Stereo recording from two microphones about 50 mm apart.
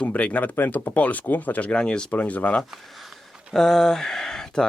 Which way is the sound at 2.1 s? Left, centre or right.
Left.